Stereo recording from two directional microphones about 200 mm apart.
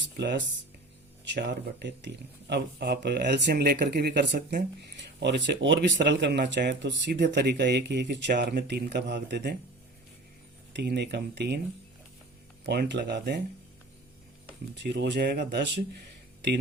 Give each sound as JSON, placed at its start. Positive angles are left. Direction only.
{"t": 0.2, "sound": "speech", "side_deg": -60}
{"t": 10.8, "sound": "speech", "side_deg": -55}
{"t": 12.6, "sound": "speech", "side_deg": -55}
{"t": 14.8, "sound": "speech", "side_deg": -60}